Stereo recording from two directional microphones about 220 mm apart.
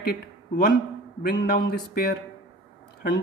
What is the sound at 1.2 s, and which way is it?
Speech, 45° left (ahead or behind).